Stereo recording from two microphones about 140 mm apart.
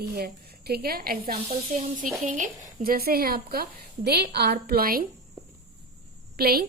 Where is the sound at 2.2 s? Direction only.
65° right (ahead or behind); by 5.0 s 90° right.